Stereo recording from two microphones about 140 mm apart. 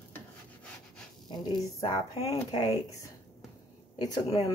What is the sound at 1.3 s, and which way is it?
Speech, 30° left (ahead or behind).